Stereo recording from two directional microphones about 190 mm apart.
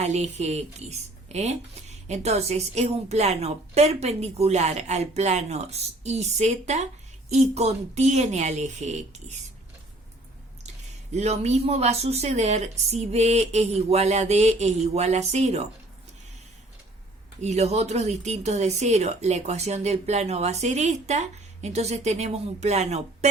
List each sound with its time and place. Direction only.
0.0 s speech: 35° right (ahead or behind)
11.1 s speech: 35° right (ahead or behind)
17.4 s speech: 35° right (ahead or behind)